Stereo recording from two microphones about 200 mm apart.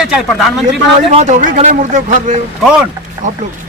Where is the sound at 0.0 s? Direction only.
Centre (ahead or behind).